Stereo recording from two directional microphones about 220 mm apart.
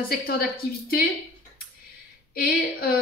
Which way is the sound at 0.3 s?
45° left (ahead or behind).